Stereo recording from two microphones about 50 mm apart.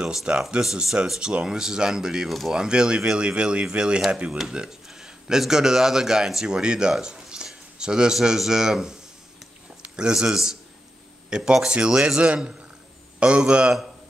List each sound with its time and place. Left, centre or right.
0.0 s speech: centre
2.2 s speech: centre
2.5 s speech: centre
13.2 s speech: right